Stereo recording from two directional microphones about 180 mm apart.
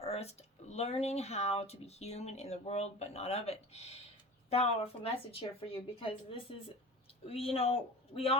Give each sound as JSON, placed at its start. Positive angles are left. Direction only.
{"t": 0.0, "sound": "speech", "side_deg": 35}